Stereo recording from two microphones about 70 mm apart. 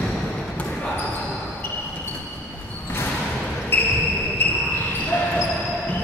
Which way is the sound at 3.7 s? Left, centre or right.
Left.